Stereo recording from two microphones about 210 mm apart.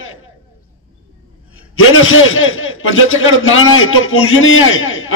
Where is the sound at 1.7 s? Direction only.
70° left (ahead or behind).